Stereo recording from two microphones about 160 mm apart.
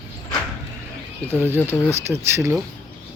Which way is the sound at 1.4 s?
15° right (ahead or behind).